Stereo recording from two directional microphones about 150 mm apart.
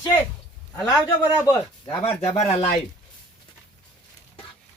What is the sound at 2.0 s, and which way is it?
Speech, 45° left (ahead or behind).